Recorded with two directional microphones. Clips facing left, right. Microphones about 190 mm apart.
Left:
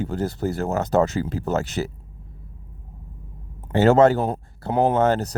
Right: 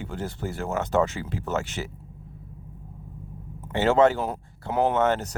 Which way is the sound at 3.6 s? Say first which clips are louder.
Left 4 dB; 40° left (ahead or behind).